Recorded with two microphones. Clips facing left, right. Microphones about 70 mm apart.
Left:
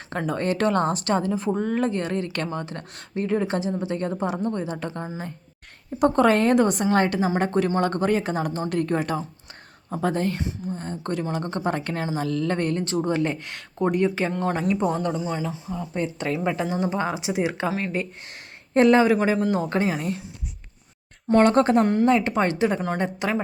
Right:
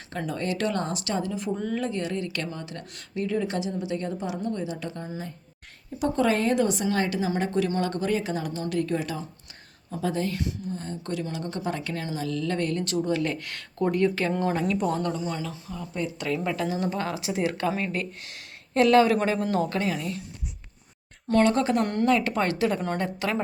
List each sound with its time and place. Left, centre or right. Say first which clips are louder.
0.1 s a woman's voice: left 5 dB; left
6.0 s a woman's voice: left 5 dB; left
16.3 s speech: left 1 dB; left
17.7 s speech: left 1 dB; centre
18.7 s speech: left 2 dB; left
19.0 s a man's voice: left 4 dB; centre
19.7 s speech: left 4 dB; left
21.4 s a woman's voice: left 6 dB; left
22.0 s speech: left 3 dB; left